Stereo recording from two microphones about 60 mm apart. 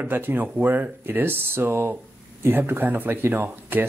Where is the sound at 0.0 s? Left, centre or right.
Right.